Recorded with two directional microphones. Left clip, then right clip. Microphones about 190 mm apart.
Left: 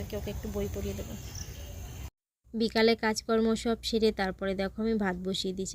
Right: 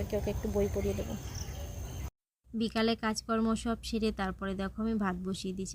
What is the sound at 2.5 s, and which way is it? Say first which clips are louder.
A woman's voice: left 6 dB; 15° left (ahead or behind).